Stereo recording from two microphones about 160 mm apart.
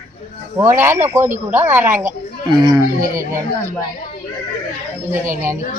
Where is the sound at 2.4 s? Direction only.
25° right (ahead or behind).